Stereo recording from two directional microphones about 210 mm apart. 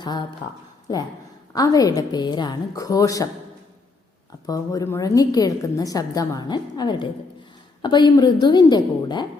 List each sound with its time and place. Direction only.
0.0 s speech: 20° left (ahead or behind)
1.5 s a woman's voice: 15° left (ahead or behind)
4.4 s a woman's voice: 15° left (ahead or behind)